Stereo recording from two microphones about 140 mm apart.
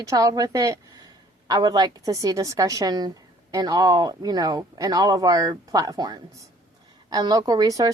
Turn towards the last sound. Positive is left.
turn(degrees=-25)  # may be behind; listen again after turning